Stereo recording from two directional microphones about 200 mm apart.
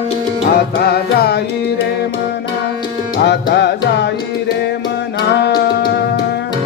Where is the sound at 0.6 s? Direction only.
55° left (ahead or behind).